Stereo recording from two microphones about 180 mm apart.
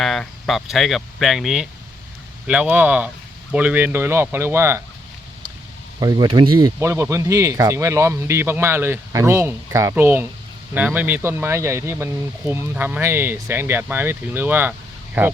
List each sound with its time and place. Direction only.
0.0 s speech: centre (ahead or behind); by 4.8 s 15° right (ahead or behind)
6.0 s speech: 25° right (ahead or behind)